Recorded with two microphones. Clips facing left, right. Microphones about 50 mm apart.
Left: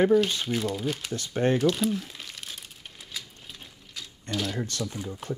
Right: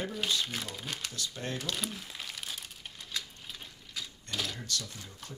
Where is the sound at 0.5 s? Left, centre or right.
Centre.